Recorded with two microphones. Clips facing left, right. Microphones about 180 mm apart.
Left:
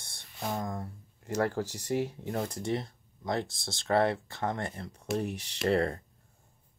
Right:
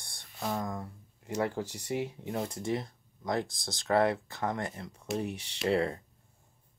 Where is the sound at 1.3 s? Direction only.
40° left (ahead or behind).